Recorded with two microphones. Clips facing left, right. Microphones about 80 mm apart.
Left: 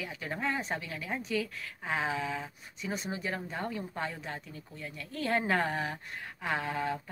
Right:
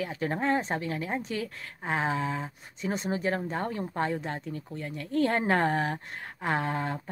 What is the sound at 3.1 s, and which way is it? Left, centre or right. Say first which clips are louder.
A woman's voice: right 7 dB; right.